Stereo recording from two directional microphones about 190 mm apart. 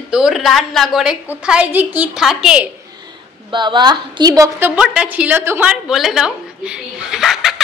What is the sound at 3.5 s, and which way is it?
A woman's voice, 25° right (ahead or behind).